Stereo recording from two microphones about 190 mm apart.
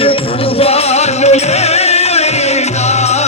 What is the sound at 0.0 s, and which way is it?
Music, 30° left (ahead or behind).